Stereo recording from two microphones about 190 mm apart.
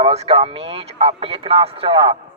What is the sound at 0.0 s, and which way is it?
Speech, 30° right (ahead or behind).